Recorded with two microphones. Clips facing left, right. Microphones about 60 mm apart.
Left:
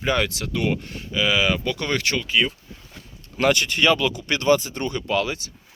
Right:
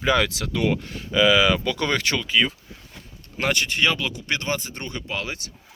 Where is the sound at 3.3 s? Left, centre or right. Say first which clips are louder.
Left 4 dB; right.